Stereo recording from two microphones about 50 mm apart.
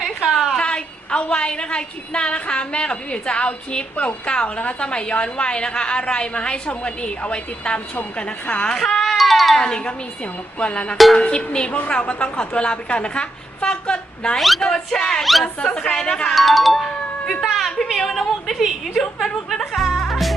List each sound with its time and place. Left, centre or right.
0.3 s a sound: centre
0.5 s a woman's voice: left
8.7 s speech: centre
9.6 s a woman's voice: centre
10.9 s a woman's voice: centre
11.2 s a woman's voice: centre
14.3 s a woman's voice: centre
15.2 s a woman's voice: centre
15.6 s a woman's voice: left
16.3 s speech: centre
17.4 s a sound: centre
17.8 s a woman's voice: centre
19.7 s music: centre